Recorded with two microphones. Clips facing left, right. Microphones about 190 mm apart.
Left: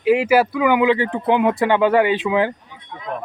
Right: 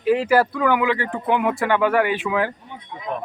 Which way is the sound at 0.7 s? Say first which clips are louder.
Left 5 dB; 20° left (ahead or behind).